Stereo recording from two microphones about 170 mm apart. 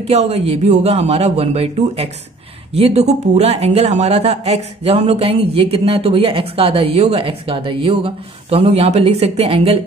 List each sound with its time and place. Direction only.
0.0 s speech: 40° right (ahead or behind)